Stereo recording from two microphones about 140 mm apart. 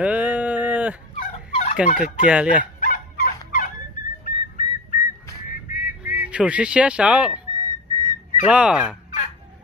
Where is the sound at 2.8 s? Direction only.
75° left (ahead or behind).